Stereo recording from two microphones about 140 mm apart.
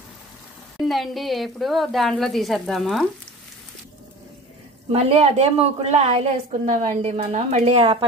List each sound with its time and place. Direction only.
0.8 s speech: centre (ahead or behind)
4.9 s a woman's voice: 50° right (ahead or behind)
7.0 s a woman's voice: 45° right (ahead or behind)